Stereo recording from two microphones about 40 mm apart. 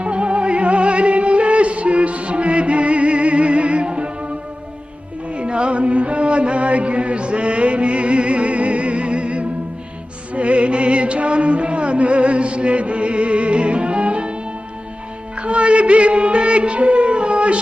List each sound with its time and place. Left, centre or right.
0.0 s music: right
5.3 s music: right
15.4 s music: right